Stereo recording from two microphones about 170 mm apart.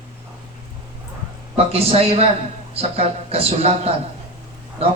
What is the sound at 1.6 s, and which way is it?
A man's voice, 35° right (ahead or behind).